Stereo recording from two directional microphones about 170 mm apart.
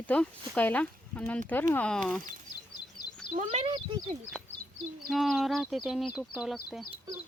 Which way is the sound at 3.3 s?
45° right (ahead or behind).